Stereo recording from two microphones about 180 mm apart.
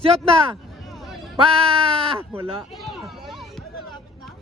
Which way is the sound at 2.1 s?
10° right (ahead or behind).